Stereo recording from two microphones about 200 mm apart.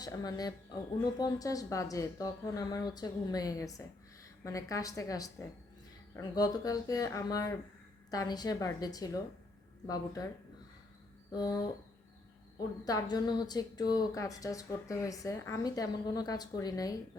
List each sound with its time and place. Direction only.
0.0 s a woman's voice: 20° left (ahead or behind)
11.3 s a woman's voice: 20° left (ahead or behind)